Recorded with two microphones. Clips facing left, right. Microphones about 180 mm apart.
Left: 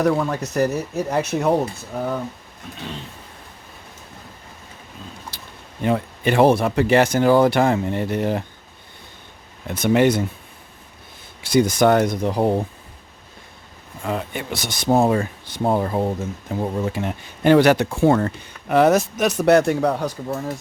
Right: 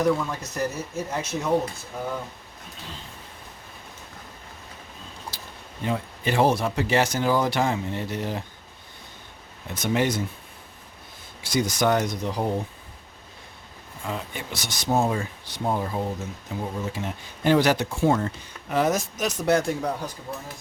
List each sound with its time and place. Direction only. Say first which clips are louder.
0.0 s speech: left 4 dB; 65° left (ahead or behind)
5.8 s speech: left 7 dB; 60° left (ahead or behind)
9.6 s speech: left 8 dB; 60° left (ahead or behind)
11.4 s speech: left 7 dB; 55° left (ahead or behind)
14.0 s speech: left 7 dB; 60° left (ahead or behind); by 20.4 s 75° left (ahead or behind)